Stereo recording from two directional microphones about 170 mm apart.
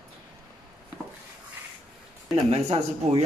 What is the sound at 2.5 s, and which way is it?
Speech, 40° right (ahead or behind).